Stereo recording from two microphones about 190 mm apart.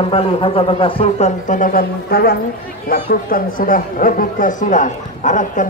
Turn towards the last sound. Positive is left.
turn(degrees=40)  # may be behind; listen again after turning